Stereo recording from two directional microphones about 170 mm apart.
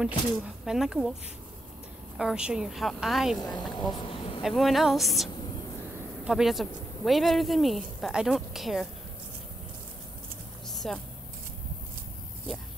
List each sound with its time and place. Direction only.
0.0 s a woman's voice: centre (ahead or behind)
2.1 s a woman's voice: 5° right (ahead or behind)
3.9 s insect: 30° left (ahead or behind)
4.4 s a woman's voice: centre (ahead or behind)
10.7 s a sound: centre (ahead or behind)